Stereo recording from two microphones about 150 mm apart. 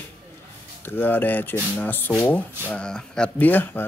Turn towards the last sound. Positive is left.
turn(degrees=10)  # may be behind; listen again after turning